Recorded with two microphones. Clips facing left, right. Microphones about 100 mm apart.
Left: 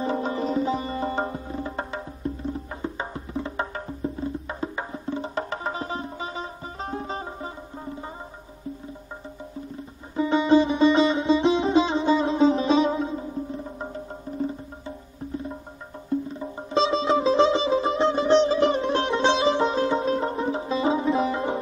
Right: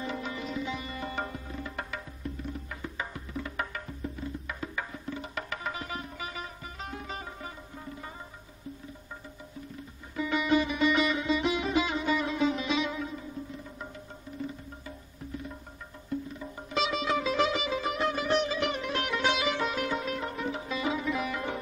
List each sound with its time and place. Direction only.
0.0 s music: 35° left (ahead or behind)
10.1 s music: 30° left (ahead or behind)